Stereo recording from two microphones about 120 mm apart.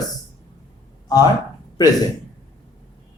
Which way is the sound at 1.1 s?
35° left (ahead or behind).